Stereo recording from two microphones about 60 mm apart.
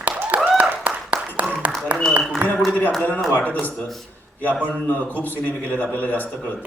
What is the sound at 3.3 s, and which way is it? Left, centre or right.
A man's voice, left.